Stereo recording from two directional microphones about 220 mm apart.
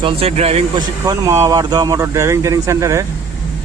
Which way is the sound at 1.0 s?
15° right (ahead or behind).